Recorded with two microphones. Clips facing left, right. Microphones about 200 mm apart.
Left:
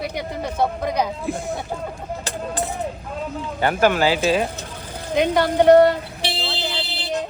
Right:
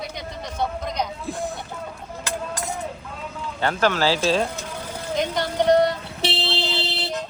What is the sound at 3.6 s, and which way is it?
Speech, 15° left (ahead or behind).